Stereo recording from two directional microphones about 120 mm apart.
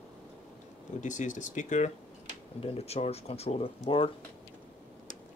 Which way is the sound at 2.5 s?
55° left (ahead or behind).